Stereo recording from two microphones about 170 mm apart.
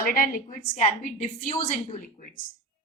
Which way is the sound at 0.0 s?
55° left (ahead or behind).